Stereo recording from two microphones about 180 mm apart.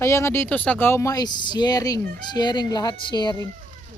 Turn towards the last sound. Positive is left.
turn(degrees=25)  # may be behind; listen again after turning